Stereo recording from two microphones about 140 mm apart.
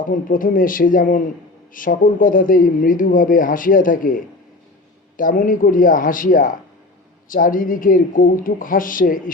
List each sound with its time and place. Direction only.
0.0 s speech: 80° left